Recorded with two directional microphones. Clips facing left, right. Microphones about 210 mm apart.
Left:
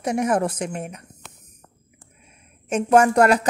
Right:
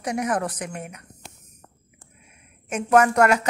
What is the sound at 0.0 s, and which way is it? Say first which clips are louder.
A woman's voice: left 4 dB; 25° left (ahead or behind).